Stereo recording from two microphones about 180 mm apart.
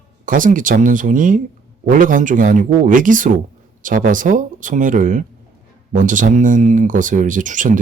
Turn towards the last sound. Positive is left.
turn(degrees=-45)  # may be behind; listen again after turning